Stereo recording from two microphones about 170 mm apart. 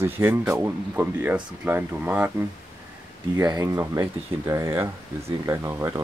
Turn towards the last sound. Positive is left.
turn(degrees=-15)  # may be behind; listen again after turning